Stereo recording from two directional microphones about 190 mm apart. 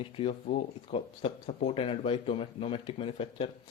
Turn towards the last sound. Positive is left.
turn(degrees=30)  # may be behind; listen again after turning